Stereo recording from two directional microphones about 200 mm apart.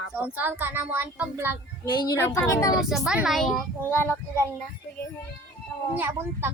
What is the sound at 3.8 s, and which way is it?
Speech, 10° left (ahead or behind).